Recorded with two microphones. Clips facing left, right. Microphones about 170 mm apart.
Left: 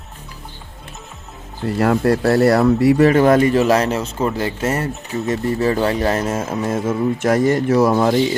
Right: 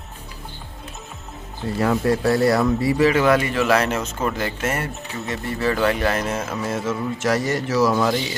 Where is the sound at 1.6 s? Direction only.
65° left (ahead or behind).